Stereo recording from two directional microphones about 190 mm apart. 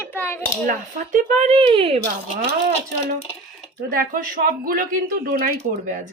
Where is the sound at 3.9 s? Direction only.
50° right (ahead or behind).